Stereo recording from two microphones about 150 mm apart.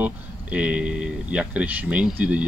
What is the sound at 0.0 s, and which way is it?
Speech, 10° right (ahead or behind).